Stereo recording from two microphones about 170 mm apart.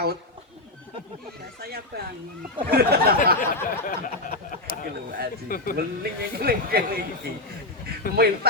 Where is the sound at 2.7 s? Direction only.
65° right (ahead or behind).